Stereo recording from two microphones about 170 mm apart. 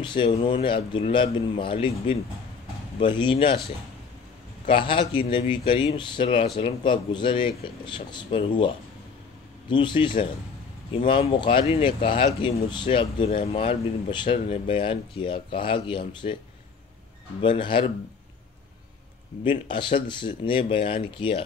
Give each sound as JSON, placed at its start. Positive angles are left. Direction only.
{"t": 0.0, "sound": "speech", "side_deg": 30}
{"t": 4.6, "sound": "speech", "side_deg": 30}
{"t": 17.4, "sound": "speech", "side_deg": 30}
{"t": 19.4, "sound": "speech", "side_deg": 30}